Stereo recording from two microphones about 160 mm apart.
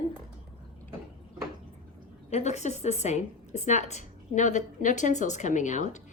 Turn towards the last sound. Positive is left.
turn(degrees=50)  # may be behind; listen again after turning